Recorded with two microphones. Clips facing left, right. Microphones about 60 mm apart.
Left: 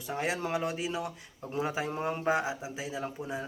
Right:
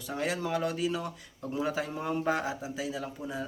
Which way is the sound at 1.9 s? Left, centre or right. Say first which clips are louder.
Even; left.